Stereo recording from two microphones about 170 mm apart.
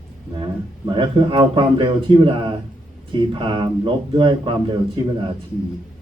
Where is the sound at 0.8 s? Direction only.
30° right (ahead or behind).